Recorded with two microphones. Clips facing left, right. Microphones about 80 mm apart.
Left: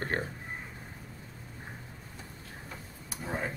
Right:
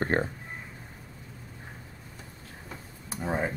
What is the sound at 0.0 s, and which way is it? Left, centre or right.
Speech, right.